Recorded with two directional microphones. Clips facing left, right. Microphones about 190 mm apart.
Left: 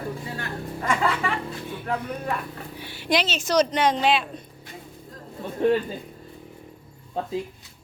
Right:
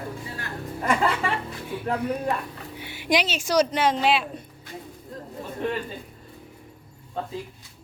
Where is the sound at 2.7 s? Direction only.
20° right (ahead or behind).